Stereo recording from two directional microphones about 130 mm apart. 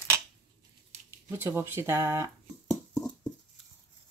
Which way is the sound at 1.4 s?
15° right (ahead or behind).